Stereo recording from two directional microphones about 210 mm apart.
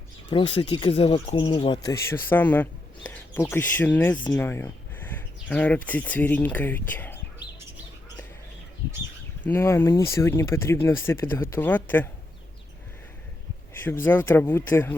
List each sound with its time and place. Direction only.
0.3 s speech: 25° left (ahead or behind)
9.4 s speech: 10° left (ahead or behind)
14.0 s speech: 10° left (ahead or behind)